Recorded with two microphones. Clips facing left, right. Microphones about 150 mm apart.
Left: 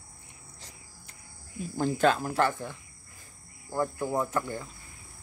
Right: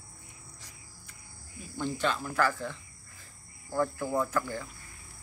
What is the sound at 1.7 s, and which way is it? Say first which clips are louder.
Speech: left 6 dB; 45° left (ahead or behind).